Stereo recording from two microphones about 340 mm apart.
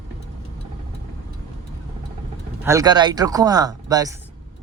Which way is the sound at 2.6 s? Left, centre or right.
Centre.